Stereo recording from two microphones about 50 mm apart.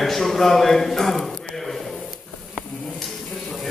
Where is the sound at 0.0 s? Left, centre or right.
Centre.